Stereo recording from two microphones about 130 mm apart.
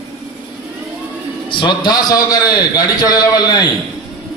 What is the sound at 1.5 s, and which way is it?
A man's voice, 35° left (ahead or behind).